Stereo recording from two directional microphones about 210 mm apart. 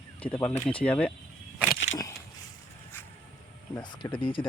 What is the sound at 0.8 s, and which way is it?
Speech, 5° left (ahead or behind).